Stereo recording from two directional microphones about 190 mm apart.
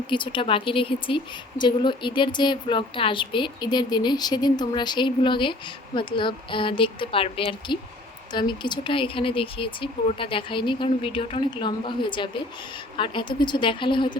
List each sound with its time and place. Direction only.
0.1 s speech: 25° left (ahead or behind)